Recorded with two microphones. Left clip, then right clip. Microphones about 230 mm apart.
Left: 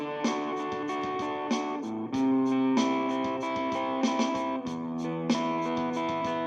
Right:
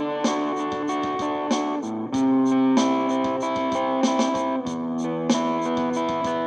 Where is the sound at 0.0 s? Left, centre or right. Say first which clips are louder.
Right 7 dB; right.